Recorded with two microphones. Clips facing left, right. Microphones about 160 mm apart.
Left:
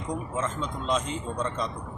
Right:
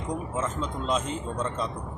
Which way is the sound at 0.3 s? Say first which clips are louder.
Even; 5° right (ahead or behind).